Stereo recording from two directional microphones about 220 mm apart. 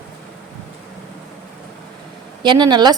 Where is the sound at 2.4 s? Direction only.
20° right (ahead or behind).